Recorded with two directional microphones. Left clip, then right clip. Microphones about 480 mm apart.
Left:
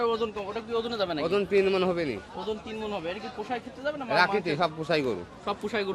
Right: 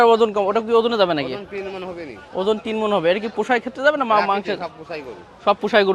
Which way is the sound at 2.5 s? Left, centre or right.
Right.